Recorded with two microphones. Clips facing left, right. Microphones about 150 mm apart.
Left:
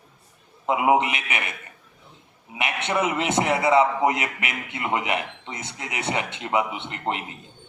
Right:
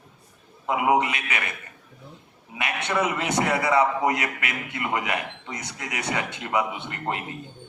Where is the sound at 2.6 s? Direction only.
25° left (ahead or behind).